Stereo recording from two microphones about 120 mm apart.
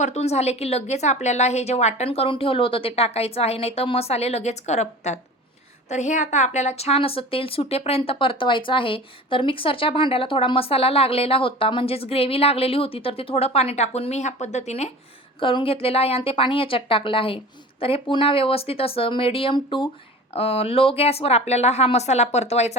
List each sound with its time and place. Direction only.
0.0 s a woman's voice: 60° left (ahead or behind)
5.9 s a woman's voice: 80° left
15.4 s a woman's voice: 45° left (ahead or behind)
20.3 s a woman's voice: 55° left (ahead or behind)